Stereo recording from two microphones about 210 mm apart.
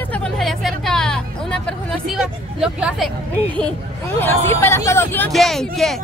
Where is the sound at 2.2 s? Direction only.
Centre (ahead or behind).